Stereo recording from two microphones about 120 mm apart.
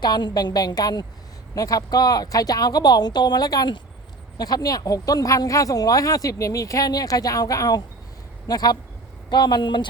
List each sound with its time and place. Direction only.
0.0 s speech: 35° left (ahead or behind)